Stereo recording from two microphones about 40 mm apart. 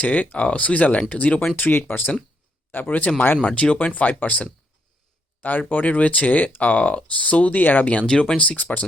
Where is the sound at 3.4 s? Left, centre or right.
Left.